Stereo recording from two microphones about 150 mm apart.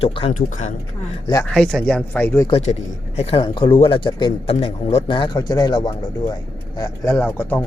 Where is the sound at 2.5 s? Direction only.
45° left (ahead or behind); by 7.1 s 25° left (ahead or behind).